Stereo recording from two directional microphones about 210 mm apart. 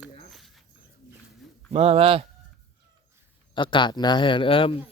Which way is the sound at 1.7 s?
30° right (ahead or behind).